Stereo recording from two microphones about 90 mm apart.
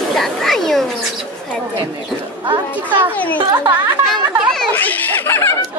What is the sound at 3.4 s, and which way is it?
Speech, 40° right (ahead or behind).